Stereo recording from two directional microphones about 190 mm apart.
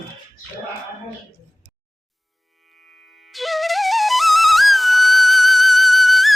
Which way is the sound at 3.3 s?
Centre (ahead or behind).